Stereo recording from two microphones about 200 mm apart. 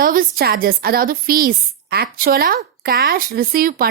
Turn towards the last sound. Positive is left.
turn(degrees=-45)  # may be behind; listen again after turning